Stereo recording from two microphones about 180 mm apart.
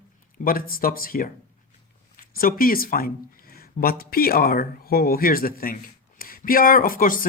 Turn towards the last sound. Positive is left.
turn(degrees=50)  # may be behind; listen again after turning